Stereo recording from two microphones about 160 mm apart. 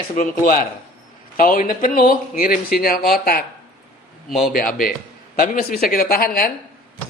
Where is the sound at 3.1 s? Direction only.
70° left (ahead or behind).